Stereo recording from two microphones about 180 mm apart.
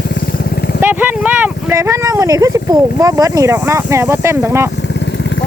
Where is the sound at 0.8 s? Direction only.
10° right (ahead or behind).